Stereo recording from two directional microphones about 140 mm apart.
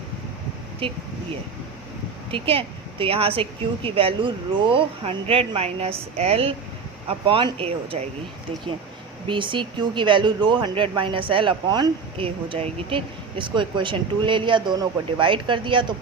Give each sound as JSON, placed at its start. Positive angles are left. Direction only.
{"t": 0.8, "sound": "speech", "side_deg": -40}
{"t": 2.3, "sound": "speech", "side_deg": -40}
{"t": 9.2, "sound": "speech", "side_deg": -35}